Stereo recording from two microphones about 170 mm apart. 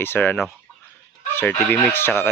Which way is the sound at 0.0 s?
10° left (ahead or behind).